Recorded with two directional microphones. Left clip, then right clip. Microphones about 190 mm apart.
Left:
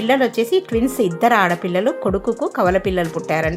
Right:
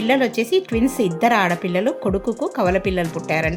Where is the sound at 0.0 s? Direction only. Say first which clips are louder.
Left 2 dB; 5° left (ahead or behind).